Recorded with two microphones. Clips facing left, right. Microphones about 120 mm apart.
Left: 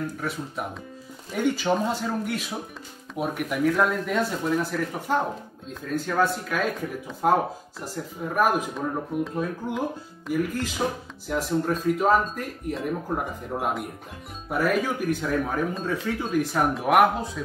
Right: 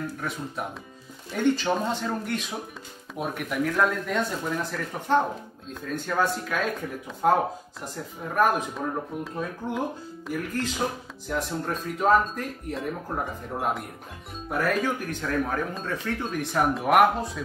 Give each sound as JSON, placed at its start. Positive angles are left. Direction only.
{"t": 0.2, "sound": "speech", "side_deg": 0}